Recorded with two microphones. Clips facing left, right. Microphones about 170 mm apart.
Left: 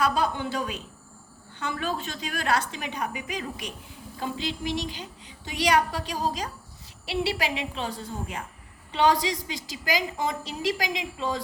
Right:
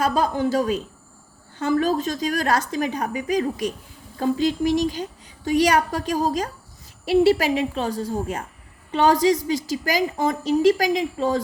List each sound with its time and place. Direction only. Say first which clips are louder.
0.0 s a woman's voice: right 5 dB; 40° right (ahead or behind)